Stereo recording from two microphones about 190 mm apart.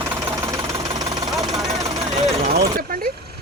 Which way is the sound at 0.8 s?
25° right (ahead or behind).